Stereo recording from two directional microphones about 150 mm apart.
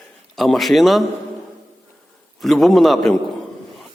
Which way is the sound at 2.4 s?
Centre (ahead or behind).